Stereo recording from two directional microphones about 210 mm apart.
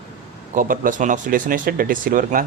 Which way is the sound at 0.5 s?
40° right (ahead or behind).